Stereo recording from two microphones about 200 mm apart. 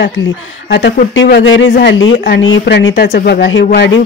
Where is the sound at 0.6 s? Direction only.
60° left (ahead or behind).